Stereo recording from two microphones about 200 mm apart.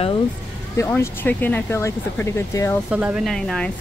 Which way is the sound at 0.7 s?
15° left (ahead or behind).